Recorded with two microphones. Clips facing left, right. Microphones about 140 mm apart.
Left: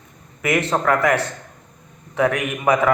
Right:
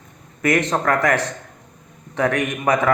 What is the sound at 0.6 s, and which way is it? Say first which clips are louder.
Speech: left 1 dB; 40° right (ahead or behind).